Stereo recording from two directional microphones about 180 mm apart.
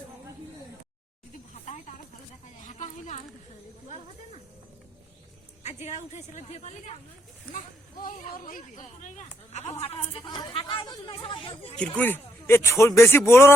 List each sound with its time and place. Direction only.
1.6 s snake: 40° left (ahead or behind)
2.6 s a sound: 45° left (ahead or behind)
5.6 s a woman's voice: 40° left (ahead or behind)
8.0 s speech: 50° left (ahead or behind); by 11.5 s 30° left (ahead or behind)
11.7 s speech: 5° left (ahead or behind)